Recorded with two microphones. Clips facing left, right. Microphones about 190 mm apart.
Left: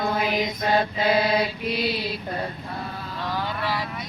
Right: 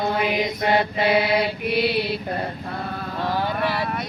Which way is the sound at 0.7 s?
65° right (ahead or behind).